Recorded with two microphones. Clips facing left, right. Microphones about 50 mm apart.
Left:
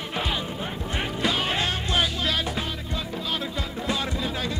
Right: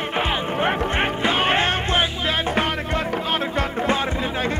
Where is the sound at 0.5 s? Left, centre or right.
Right.